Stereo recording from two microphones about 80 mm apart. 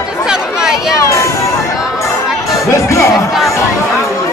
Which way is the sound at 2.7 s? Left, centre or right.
Left.